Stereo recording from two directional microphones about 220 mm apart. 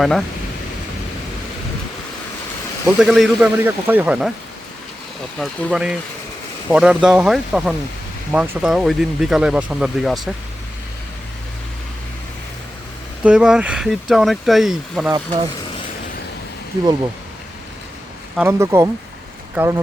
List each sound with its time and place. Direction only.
0.0 s speech: centre (ahead or behind)
2.8 s speech: 5° right (ahead or behind)
5.4 s speech: 5° left (ahead or behind)
13.2 s speech: 5° right (ahead or behind)
15.1 s speech: 20° right (ahead or behind)
18.3 s speech: 10° right (ahead or behind)